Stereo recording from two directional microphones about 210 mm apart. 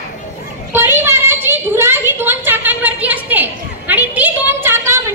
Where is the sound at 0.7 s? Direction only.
10° right (ahead or behind).